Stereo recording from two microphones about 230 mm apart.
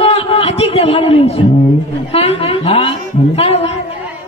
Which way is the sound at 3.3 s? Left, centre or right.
Left.